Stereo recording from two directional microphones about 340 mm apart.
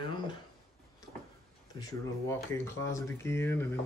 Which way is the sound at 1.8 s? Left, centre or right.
Centre.